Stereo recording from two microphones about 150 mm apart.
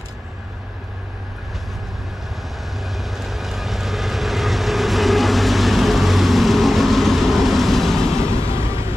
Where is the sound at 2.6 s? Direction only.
Centre (ahead or behind).